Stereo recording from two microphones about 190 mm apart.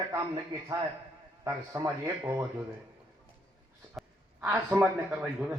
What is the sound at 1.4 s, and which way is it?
Speech, 15° right (ahead or behind).